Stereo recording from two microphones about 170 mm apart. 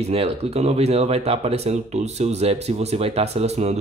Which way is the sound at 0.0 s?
35° right (ahead or behind).